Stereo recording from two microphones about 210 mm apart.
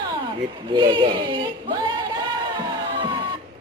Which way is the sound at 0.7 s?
20° right (ahead or behind).